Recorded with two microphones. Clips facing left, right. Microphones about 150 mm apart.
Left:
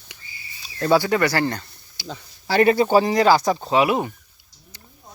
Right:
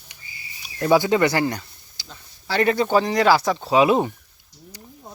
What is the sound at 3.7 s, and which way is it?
Speech, 20° right (ahead or behind).